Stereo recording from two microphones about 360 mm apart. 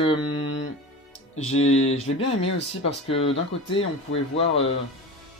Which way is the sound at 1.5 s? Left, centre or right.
Left.